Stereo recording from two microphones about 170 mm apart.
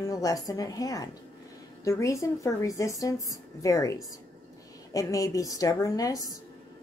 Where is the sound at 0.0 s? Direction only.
20° left (ahead or behind).